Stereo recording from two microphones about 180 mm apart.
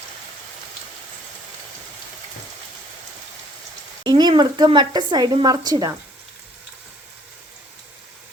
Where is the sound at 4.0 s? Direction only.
25° right (ahead or behind).